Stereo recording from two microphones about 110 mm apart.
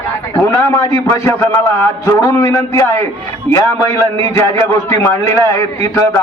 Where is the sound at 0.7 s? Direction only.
25° left (ahead or behind).